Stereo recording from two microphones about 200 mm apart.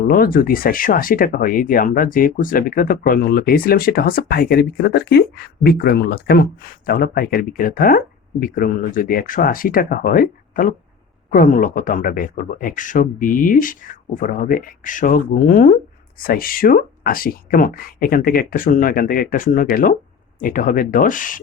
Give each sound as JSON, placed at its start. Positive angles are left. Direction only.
{"t": 0.1, "sound": "speech", "side_deg": 45}